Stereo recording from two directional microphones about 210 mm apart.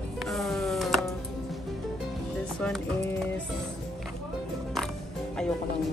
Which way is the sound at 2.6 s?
5° left (ahead or behind).